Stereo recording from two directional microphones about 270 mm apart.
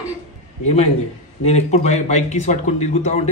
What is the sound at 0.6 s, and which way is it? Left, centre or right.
Speech, left.